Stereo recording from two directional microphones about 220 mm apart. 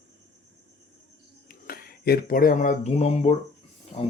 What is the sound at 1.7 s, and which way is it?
Speech, 45° left (ahead or behind).